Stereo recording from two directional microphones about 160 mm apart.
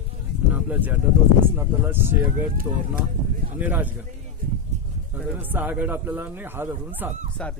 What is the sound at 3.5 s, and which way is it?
Speech, 10° right (ahead or behind).